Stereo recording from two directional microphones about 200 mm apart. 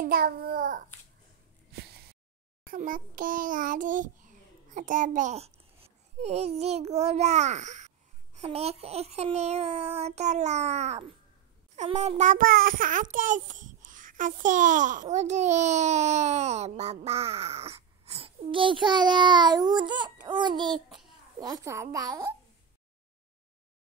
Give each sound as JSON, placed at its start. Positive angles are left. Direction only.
{"t": 0.0, "sound": "child singing", "side_deg": -50}
{"t": 1.7, "sound": "a sound", "side_deg": -50}
{"t": 2.6, "sound": "a child's voice", "side_deg": -45}
{"t": 20.7, "sound": "a child's voice", "side_deg": 0}
{"t": 21.4, "sound": "a child's voice", "side_deg": -20}